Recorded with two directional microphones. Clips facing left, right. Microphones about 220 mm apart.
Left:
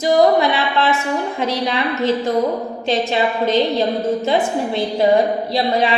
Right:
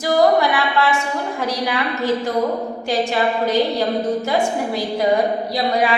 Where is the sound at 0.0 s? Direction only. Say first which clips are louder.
Left 2 dB; 20° left (ahead or behind).